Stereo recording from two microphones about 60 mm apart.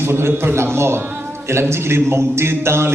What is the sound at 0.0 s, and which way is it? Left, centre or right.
A man's voice, right.